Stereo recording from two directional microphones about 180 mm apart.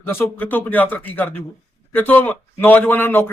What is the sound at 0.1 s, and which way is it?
A man's voice, 10° left (ahead or behind).